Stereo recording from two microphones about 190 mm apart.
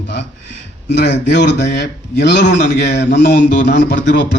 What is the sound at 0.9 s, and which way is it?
A man's voice, 65° left (ahead or behind).